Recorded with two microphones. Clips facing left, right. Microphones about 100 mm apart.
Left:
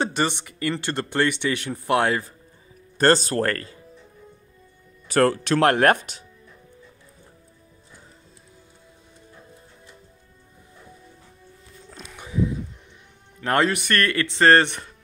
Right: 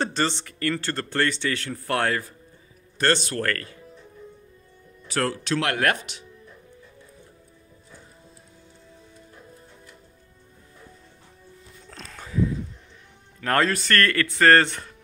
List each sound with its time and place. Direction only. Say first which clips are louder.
0.0 s a man's voice: left 1 dB; 15° left (ahead or behind)
3.0 s speech: left 5 dB; 35° left (ahead or behind)
5.0 s speech: left 7 dB; 50° left (ahead or behind)
11.9 s a sound: even; 10° left (ahead or behind)
13.4 s speech: left 1 dB; 20° left (ahead or behind)